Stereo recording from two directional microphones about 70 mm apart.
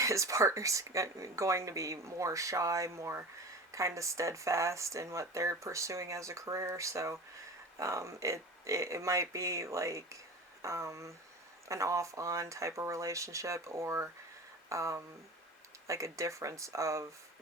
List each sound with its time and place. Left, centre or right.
0.0 s speech: right